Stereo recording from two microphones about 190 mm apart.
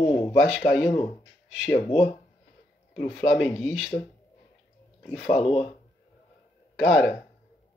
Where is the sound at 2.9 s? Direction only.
5° left (ahead or behind).